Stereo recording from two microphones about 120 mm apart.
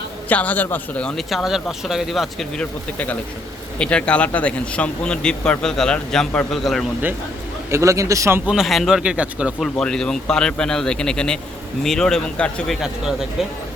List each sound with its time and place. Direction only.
0.3 s speech: 15° left (ahead or behind)
2.6 s a man's voice: 10° left (ahead or behind)
7.7 s a man's voice: 25° right (ahead or behind)
8.4 s speech: 5° right (ahead or behind)
9.7 s a man's voice: 5° left (ahead or behind)